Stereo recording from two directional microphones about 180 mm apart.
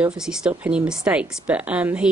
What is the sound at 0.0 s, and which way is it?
Speech, 5° right (ahead or behind).